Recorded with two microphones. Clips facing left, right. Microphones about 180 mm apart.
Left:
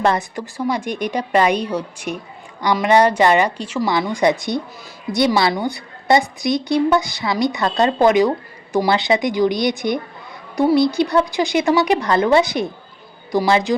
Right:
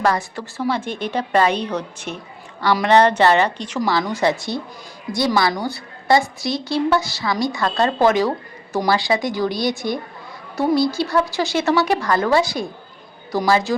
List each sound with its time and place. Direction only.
0.0 s a woman's voice: 20° left (ahead or behind)
3.9 s a woman's voice: 20° left (ahead or behind)